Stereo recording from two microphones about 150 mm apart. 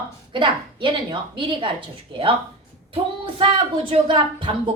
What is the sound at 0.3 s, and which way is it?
A woman's voice, 35° right (ahead or behind).